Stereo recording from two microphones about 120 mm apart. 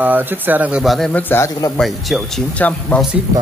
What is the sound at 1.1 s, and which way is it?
Speech, 15° left (ahead or behind).